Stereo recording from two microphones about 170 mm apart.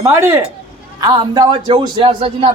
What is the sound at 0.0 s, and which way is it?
A man's voice, 15° right (ahead or behind).